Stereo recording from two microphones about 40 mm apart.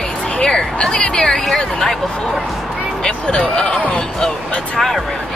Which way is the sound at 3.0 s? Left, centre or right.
Left.